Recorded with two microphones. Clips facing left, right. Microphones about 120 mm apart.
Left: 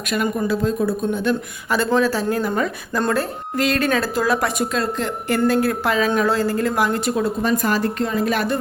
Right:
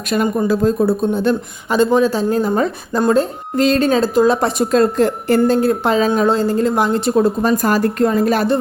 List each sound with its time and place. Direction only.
0.1 s a woman's voice: 35° right (ahead or behind)
1.7 s a woman's voice: 20° right (ahead or behind)
4.8 s a woman's voice: 45° right (ahead or behind)
5.5 s a woman's voice: 25° right (ahead or behind)